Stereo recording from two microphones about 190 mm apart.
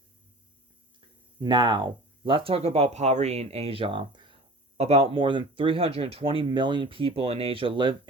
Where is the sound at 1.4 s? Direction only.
25° right (ahead or behind).